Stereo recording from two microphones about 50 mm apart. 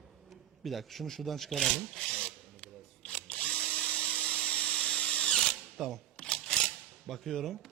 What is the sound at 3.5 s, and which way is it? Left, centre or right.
Drill, centre.